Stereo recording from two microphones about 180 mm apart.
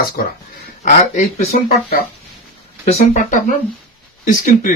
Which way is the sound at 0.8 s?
40° left (ahead or behind).